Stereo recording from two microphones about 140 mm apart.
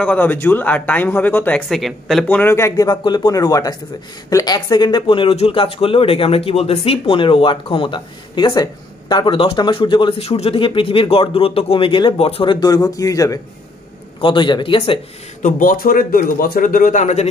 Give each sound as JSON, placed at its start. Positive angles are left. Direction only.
{"t": 0.0, "sound": "speech", "side_deg": 10}
{"t": 1.7, "sound": "speech", "side_deg": 0}
{"t": 2.2, "sound": "speech", "side_deg": 15}
{"t": 12.5, "sound": "speech", "side_deg": 25}
{"t": 14.2, "sound": "speech", "side_deg": 35}
{"t": 15.4, "sound": "a man's voice", "side_deg": 85}